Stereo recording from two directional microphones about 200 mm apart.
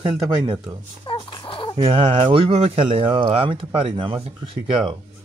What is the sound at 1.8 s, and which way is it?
Speech, 25° right (ahead or behind).